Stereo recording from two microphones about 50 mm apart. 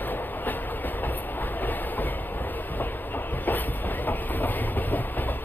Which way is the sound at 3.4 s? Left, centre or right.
Left.